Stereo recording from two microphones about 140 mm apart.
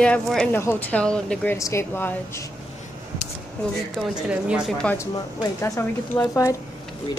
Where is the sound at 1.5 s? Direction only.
20° left (ahead or behind).